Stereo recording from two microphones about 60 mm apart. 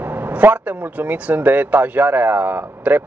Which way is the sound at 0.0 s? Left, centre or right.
Right.